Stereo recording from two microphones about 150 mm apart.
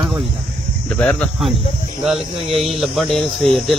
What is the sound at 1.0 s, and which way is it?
Speech, 5° left (ahead or behind).